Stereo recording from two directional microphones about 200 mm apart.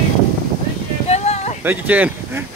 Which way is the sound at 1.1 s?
35° left (ahead or behind).